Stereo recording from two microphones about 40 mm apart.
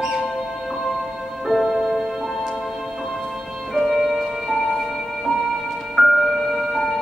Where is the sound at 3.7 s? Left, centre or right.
Centre.